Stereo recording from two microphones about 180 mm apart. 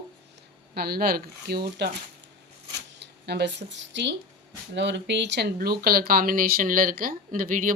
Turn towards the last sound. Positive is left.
turn(degrees=-50)  # may be behind; listen again after turning